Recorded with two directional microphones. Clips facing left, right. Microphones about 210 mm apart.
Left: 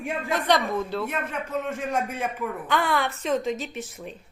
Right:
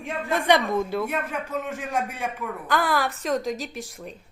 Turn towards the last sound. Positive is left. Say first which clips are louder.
# even
turn(degrees=0)  # may be behind; listen again after turning